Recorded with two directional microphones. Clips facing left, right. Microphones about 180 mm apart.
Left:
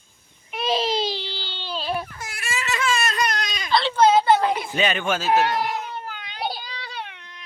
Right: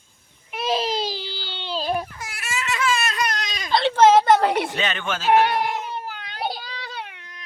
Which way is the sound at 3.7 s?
55° right (ahead or behind).